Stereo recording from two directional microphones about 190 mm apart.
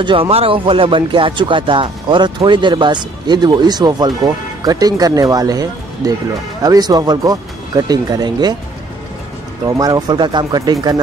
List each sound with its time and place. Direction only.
0.0 s speech: 30° right (ahead or behind)
9.7 s speech: 20° right (ahead or behind)